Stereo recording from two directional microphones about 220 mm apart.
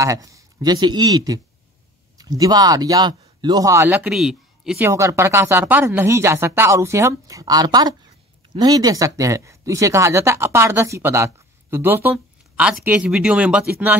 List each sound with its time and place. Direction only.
0.0 s speech: 15° right (ahead or behind)